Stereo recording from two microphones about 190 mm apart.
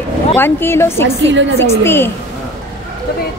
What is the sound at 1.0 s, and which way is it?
Speech, 70° right (ahead or behind).